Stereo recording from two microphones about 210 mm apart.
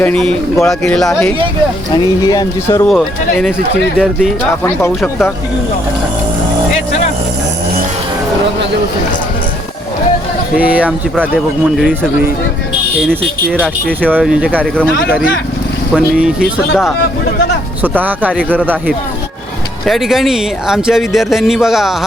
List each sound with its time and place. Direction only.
0.0 s speech: 5° left (ahead or behind)
1.9 s speech: 20° left (ahead or behind)
3.9 s speech: centre (ahead or behind)
10.6 s speech: 5° right (ahead or behind)
14.0 s speech: 5° right (ahead or behind)
16.0 s speech: 5° right (ahead or behind)
17.8 s speech: 10° right (ahead or behind)